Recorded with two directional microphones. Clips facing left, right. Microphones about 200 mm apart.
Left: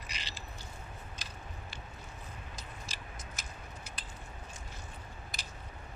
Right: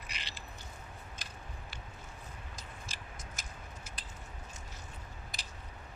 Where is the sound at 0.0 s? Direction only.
55° right (ahead or behind).